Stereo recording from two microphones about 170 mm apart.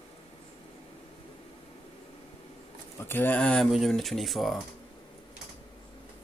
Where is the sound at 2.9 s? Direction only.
15° left (ahead or behind).